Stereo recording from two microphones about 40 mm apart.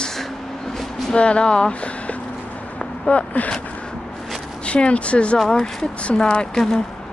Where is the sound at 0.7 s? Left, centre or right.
Centre.